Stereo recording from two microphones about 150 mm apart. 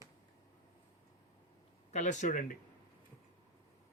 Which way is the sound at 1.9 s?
55° left (ahead or behind).